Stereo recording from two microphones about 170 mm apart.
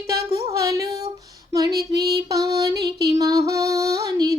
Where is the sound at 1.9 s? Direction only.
20° right (ahead or behind).